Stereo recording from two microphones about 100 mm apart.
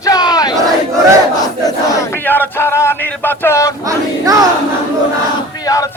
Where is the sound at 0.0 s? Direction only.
40° left (ahead or behind).